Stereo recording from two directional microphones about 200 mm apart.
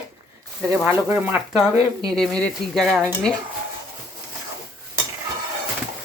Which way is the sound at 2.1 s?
5° left (ahead or behind).